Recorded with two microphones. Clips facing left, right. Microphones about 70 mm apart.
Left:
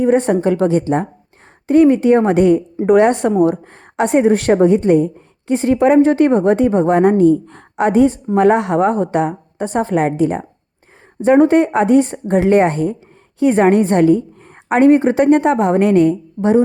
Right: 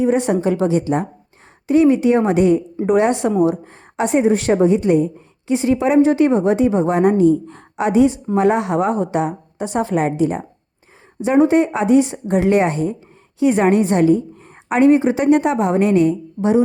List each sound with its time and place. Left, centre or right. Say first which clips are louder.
0.0 s a woman's voice: left 3 dB; left